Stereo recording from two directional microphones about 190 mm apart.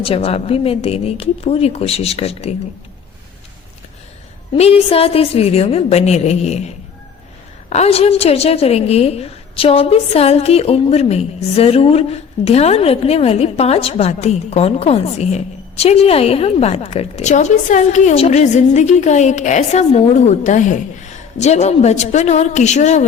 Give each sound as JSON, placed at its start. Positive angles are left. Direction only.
{"t": 0.0, "sound": "a woman's voice", "side_deg": 30}
{"t": 4.5, "sound": "a woman's voice", "side_deg": 30}